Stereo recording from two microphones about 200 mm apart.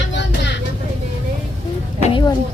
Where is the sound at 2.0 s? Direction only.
25° left (ahead or behind).